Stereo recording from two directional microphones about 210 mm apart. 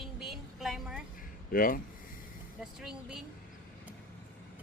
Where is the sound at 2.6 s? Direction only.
5° right (ahead or behind).